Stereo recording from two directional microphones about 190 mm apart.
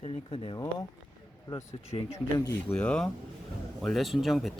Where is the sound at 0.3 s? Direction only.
30° left (ahead or behind).